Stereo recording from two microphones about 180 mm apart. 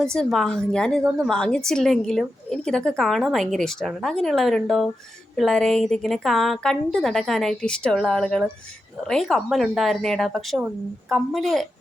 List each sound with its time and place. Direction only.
0.0 s a woman's voice: centre (ahead or behind)